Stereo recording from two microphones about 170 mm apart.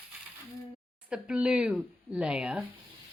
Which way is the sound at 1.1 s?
5° right (ahead or behind).